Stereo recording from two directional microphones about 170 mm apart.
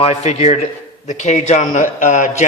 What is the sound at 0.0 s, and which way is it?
A man's voice, 35° left (ahead or behind).